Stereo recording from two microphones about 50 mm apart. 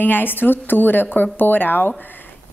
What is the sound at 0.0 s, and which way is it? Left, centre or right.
A woman's voice, left.